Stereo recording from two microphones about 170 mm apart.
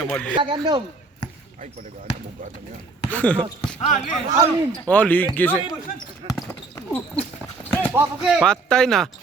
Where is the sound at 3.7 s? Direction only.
45° left (ahead or behind).